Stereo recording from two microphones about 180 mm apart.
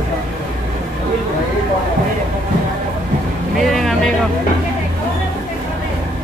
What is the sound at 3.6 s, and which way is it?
Vehicle, centre (ahead or behind).